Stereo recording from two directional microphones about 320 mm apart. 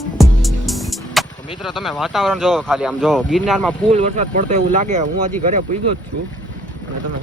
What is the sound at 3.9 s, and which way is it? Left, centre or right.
Speech, right.